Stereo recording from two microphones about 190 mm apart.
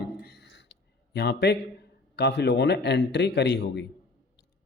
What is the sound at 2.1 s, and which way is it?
Speech, 60° left (ahead or behind).